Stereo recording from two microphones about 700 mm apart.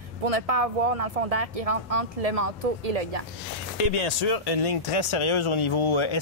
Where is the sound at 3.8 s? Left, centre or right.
Left.